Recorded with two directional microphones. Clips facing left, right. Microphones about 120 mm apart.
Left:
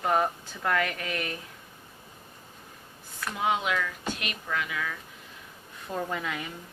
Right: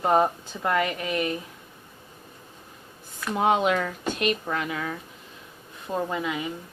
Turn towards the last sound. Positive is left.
turn(degrees=-15)  # may be behind; listen again after turning